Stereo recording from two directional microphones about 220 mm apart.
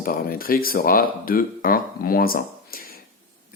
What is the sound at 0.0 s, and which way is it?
Speech, 40° left (ahead or behind).